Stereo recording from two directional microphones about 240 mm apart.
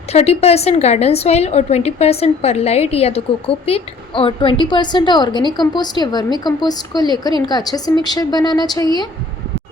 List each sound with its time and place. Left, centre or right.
0.1 s a woman's voice: left